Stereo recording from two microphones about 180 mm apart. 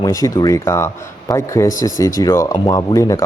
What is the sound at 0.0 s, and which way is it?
Speech, 20° left (ahead or behind).